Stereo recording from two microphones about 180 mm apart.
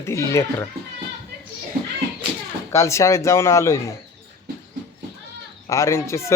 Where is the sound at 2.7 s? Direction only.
15° left (ahead or behind).